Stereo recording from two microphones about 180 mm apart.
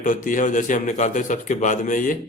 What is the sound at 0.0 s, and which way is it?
Speech, 45° left (ahead or behind).